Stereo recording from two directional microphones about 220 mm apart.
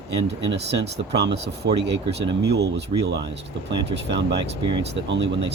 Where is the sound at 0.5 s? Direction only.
50° right (ahead or behind).